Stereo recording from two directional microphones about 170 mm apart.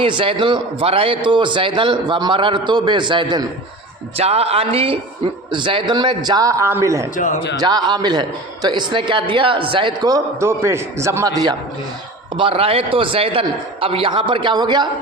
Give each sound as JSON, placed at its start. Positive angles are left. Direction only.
{"t": 0.0, "sound": "a man's voice", "side_deg": -30}
{"t": 4.2, "sound": "a man's voice", "side_deg": -40}
{"t": 12.4, "sound": "a man's voice", "side_deg": -35}